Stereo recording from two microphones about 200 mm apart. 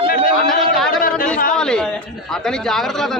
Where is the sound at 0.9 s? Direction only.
45° left (ahead or behind).